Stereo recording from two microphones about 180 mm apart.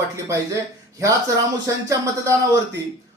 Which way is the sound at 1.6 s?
20° right (ahead or behind).